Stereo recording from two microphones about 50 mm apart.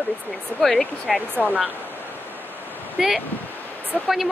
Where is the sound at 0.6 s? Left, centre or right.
Centre.